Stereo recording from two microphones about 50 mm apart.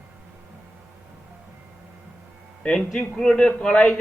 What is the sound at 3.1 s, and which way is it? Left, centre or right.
Speech, centre.